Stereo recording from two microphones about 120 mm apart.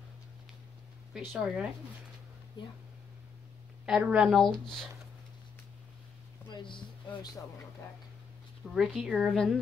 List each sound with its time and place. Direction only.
1.1 s a woman's voice: 5° right (ahead or behind)
3.8 s a woman's voice: 10° right (ahead or behind)
4.4 s a woman's voice: 5° left (ahead or behind)
6.5 s speech: 45° left (ahead or behind)
8.6 s a woman's voice: centre (ahead or behind)